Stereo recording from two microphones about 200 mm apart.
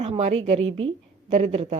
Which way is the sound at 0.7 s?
75° right (ahead or behind).